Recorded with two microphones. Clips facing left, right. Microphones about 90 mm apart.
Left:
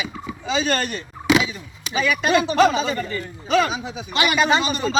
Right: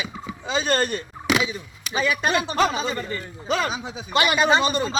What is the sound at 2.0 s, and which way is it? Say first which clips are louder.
A man's voice: left 3 dB; 35° right (ahead or behind).